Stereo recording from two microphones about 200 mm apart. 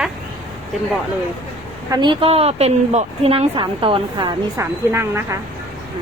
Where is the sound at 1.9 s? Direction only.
25° right (ahead or behind).